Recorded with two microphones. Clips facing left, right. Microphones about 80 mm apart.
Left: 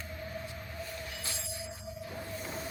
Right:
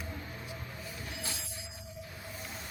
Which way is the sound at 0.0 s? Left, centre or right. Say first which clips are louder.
Left 2 dB; centre.